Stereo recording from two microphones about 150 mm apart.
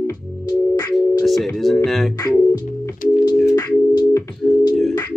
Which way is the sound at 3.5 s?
25° left (ahead or behind).